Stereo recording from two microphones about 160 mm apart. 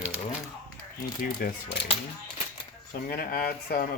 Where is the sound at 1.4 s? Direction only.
60° left (ahead or behind).